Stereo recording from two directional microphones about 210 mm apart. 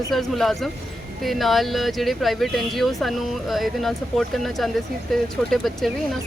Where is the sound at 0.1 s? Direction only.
Centre (ahead or behind).